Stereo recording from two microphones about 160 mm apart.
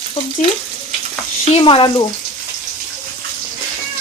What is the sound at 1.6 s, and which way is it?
Speech, 30° left (ahead or behind).